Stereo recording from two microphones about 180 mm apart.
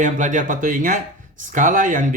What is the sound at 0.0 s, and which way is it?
Speech, 45° right (ahead or behind).